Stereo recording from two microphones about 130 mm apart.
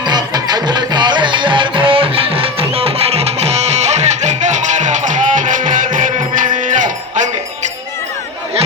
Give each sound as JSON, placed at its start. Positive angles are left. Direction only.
{"t": 0.0, "sound": "music", "side_deg": -30}